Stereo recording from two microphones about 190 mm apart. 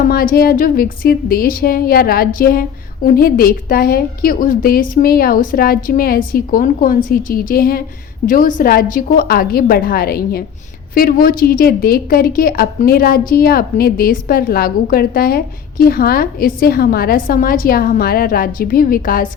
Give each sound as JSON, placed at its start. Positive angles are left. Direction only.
{"t": 0.0, "sound": "a woman's voice", "side_deg": 50}